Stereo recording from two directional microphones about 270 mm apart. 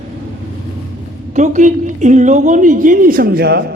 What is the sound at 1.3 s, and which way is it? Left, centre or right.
A man's voice, right.